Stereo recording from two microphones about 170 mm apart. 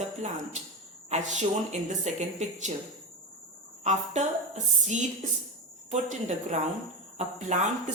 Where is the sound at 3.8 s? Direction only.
45° right (ahead or behind).